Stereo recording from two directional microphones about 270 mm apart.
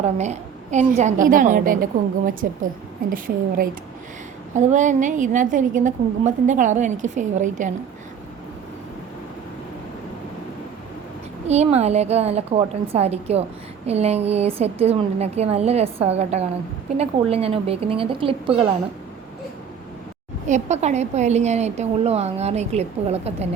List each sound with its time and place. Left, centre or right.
0.0 s a woman's voice: right
11.4 s a woman's voice: right
20.5 s a woman's voice: right